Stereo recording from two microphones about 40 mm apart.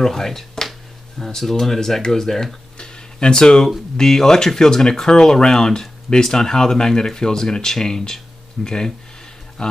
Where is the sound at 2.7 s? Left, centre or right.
Centre.